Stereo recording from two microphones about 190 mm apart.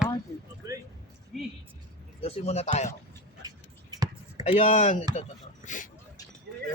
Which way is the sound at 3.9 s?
20° right (ahead or behind).